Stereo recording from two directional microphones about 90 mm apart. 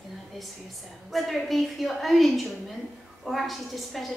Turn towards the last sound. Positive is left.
turn(degrees=0)  # may be behind; listen again after turning